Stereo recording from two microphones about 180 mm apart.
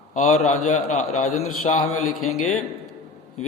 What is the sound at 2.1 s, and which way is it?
Speech, centre (ahead or behind).